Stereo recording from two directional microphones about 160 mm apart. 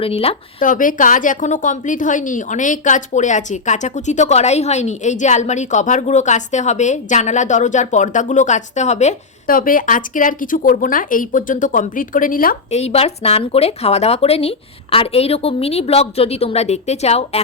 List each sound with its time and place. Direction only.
0.0 s speech: 35° left (ahead or behind)
0.6 s a woman's voice: 55° left (ahead or behind)
12.7 s speech: 40° left (ahead or behind)